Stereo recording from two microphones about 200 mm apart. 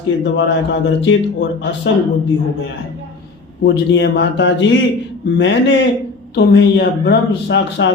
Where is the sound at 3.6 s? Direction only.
55° left (ahead or behind).